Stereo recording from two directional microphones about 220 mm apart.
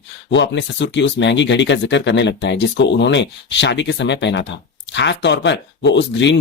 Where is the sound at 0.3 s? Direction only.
55° left (ahead or behind).